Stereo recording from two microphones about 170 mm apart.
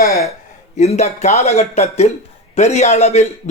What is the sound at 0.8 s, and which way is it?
A man's voice, 40° left (ahead or behind).